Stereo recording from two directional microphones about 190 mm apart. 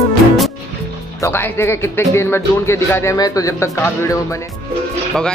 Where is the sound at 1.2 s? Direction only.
10° left (ahead or behind).